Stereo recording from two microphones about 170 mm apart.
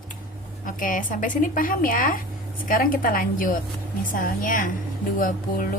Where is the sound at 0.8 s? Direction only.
50° left (ahead or behind).